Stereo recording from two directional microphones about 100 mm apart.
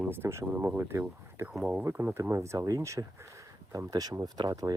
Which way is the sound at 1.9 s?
25° right (ahead or behind).